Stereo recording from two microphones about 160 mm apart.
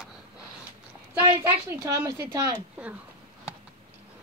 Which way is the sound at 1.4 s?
15° right (ahead or behind).